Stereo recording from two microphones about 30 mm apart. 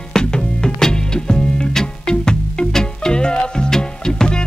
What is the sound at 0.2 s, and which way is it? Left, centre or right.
Music, left.